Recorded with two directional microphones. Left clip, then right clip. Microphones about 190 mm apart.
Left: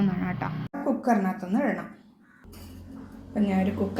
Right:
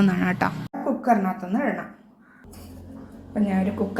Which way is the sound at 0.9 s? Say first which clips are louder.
Right 4 dB; centre (ahead or behind).